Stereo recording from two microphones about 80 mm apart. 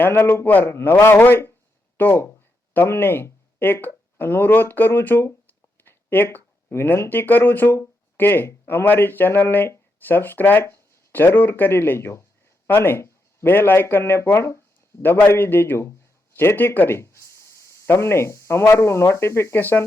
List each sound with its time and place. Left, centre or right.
0.0 s a man's voice: left